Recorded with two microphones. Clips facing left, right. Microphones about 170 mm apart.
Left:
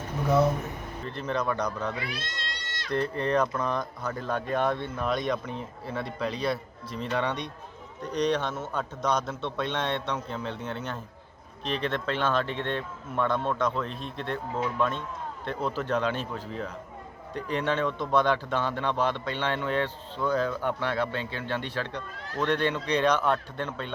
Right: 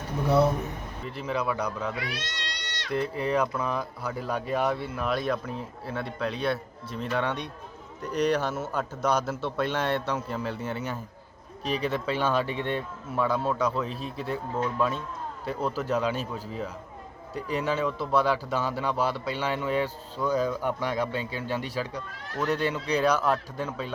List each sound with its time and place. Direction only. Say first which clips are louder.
1.0 s a man's voice: even; 5° right (ahead or behind)
2.0 s cat: right 1 dB; 80° right
2.9 s a man's voice: left 1 dB; 5° right (ahead or behind)